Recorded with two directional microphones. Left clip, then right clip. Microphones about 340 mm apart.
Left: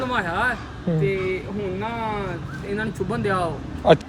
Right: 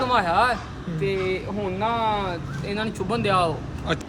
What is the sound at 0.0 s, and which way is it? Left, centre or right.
A man's voice, centre.